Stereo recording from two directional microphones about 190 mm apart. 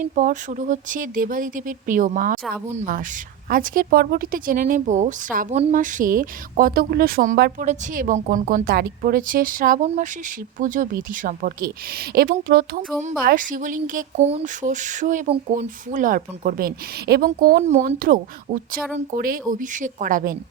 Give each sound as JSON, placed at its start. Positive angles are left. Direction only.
{"t": 0.0, "sound": "speech", "side_deg": -40}